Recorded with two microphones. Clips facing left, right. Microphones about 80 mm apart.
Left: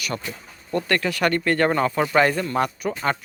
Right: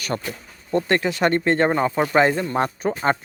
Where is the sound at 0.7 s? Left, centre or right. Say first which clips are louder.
Right 3 dB; right.